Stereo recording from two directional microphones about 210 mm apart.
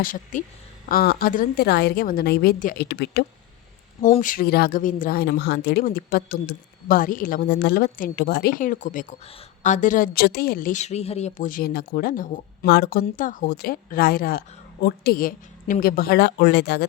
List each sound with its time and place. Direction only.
0.0 s speech: 40° left (ahead or behind)
4.0 s speech: 40° left (ahead or behind)